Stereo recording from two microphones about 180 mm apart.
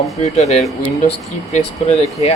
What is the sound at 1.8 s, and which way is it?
Speech, 40° left (ahead or behind).